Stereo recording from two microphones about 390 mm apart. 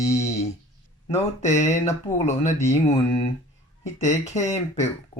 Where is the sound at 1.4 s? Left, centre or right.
Centre.